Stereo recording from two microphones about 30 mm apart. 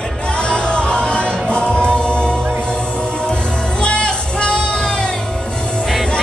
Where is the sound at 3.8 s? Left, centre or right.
Left.